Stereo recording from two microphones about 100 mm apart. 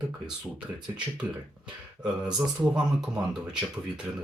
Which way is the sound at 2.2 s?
45° right (ahead or behind).